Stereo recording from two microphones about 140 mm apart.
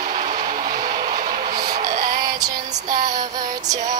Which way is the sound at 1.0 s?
60° right (ahead or behind).